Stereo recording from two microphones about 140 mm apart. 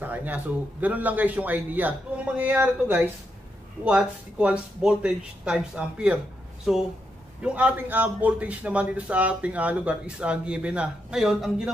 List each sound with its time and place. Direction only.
0.0 s a man's voice: 15° right (ahead or behind)